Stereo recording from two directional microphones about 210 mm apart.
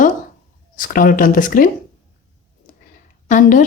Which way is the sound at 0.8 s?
40° left (ahead or behind).